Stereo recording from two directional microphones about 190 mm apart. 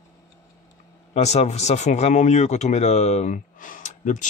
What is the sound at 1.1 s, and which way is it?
Speech, 35° left (ahead or behind).